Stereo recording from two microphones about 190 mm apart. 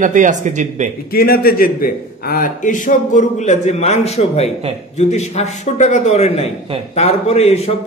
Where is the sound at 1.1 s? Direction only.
50° left (ahead or behind).